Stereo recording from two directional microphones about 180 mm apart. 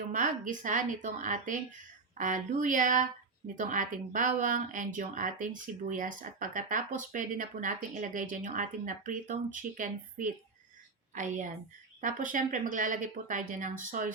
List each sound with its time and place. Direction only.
0.1 s a woman's voice: 45° right (ahead or behind)